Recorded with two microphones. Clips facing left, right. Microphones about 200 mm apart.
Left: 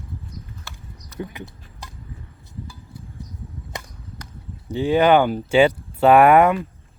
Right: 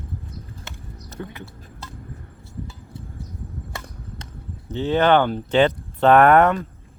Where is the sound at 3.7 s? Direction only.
20° left (ahead or behind).